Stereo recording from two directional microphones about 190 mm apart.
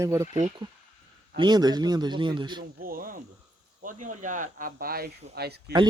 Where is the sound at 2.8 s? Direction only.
50° right (ahead or behind).